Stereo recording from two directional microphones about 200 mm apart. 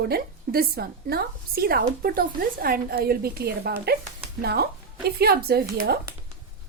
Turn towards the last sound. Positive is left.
turn(degrees=-50)  # may be behind; listen again after turning